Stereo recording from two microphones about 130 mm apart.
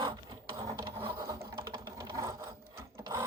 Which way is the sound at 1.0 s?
40° right (ahead or behind).